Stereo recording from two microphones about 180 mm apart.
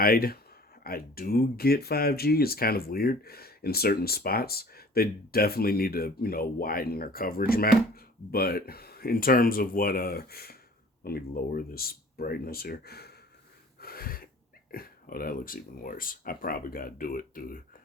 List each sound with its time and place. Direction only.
0.0 s speech: 55° left (ahead or behind)
13.7 s wheeze: 55° left (ahead or behind)
14.7 s speech: 55° left (ahead or behind)